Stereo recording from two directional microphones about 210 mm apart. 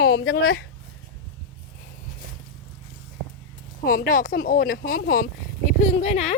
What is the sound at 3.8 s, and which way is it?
Speech, 45° left (ahead or behind).